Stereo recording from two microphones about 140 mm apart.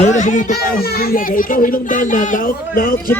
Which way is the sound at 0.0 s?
60° left (ahead or behind).